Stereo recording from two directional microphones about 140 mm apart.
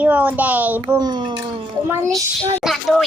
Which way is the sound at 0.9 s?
30° right (ahead or behind).